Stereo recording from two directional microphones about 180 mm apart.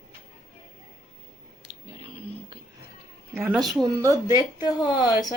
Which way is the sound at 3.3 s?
5° right (ahead or behind).